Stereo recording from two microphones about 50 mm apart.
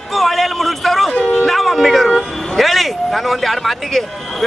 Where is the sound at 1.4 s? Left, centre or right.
Centre.